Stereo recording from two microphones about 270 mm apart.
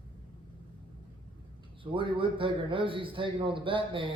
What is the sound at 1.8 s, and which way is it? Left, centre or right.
A man's voice, centre.